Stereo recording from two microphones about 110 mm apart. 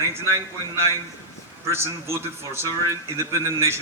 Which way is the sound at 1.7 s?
25° right (ahead or behind).